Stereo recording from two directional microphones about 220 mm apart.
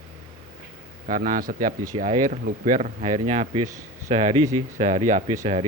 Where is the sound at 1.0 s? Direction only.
35° right (ahead or behind).